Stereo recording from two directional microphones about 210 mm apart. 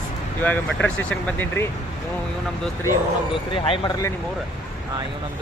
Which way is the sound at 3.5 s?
20° left (ahead or behind).